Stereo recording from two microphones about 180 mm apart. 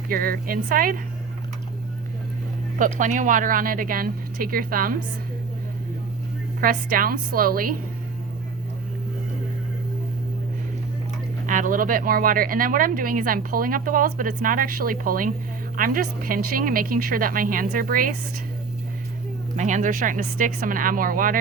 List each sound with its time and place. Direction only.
0.1 s speech: 55° right (ahead or behind)
2.7 s speech: 45° right (ahead or behind)
6.6 s speech: 50° right (ahead or behind)
11.4 s speech: 45° right (ahead or behind)
19.5 s speech: 45° right (ahead or behind)